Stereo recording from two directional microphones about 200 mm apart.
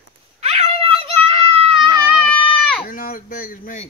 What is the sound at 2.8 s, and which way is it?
Speech, 45° left (ahead or behind).